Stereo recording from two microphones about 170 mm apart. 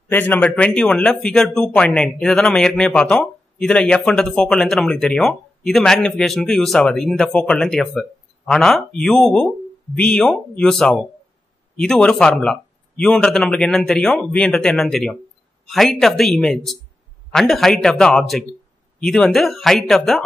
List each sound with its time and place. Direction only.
0.1 s speech: 10° left (ahead or behind)